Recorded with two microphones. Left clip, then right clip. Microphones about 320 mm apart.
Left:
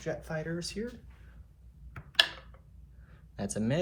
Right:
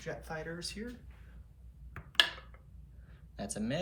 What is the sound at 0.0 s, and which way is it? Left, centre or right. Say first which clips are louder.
Speech: left 5 dB; centre.